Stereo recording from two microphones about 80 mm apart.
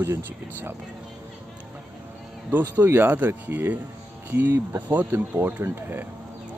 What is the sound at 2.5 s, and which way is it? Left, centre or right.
Speech, right.